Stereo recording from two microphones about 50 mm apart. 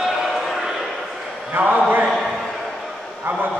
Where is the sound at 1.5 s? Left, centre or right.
Right.